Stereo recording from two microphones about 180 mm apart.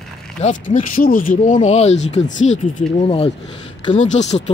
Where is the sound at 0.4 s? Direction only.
45° left (ahead or behind).